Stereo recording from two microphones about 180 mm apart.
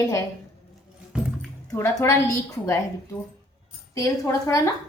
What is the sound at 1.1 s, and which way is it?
Music, 5° right (ahead or behind).